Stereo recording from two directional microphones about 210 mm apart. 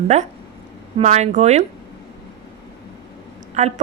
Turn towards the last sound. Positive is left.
turn(degrees=-30)  # may be behind; listen again after turning